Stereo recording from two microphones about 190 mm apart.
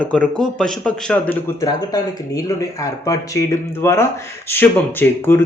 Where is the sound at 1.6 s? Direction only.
20° left (ahead or behind).